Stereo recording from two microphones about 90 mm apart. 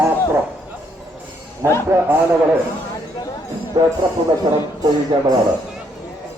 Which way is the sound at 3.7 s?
55° right (ahead or behind).